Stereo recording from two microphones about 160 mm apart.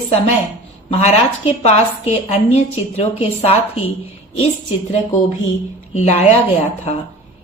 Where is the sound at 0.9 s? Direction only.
40° left (ahead or behind).